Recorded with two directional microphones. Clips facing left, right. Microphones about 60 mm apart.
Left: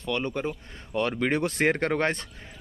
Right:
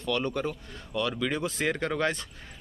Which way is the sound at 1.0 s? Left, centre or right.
Left.